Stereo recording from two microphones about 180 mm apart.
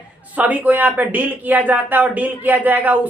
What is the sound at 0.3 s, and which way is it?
Speech, 10° right (ahead or behind).